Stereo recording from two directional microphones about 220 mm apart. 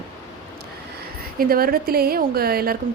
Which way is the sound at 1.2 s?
40° right (ahead or behind).